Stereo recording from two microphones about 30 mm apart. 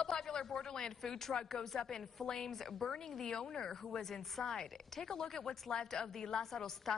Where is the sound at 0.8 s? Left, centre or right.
Centre.